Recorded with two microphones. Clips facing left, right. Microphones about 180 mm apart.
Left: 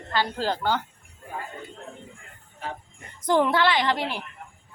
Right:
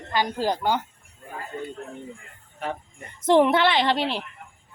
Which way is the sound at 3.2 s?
25° right (ahead or behind).